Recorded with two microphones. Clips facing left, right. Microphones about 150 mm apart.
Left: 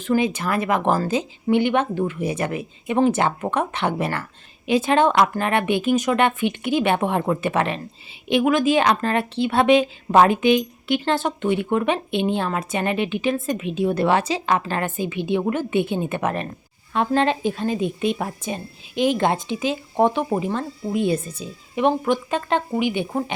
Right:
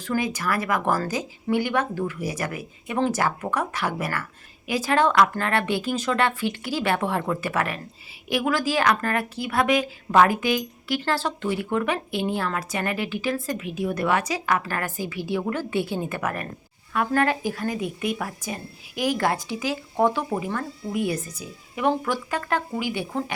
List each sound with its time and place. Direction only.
0.0 s a woman's voice: 20° left (ahead or behind)